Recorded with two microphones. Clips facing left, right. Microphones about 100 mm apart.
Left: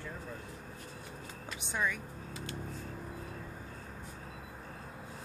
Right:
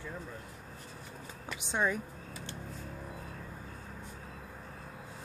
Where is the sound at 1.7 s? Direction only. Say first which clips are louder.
Right 3 dB; 30° right (ahead or behind).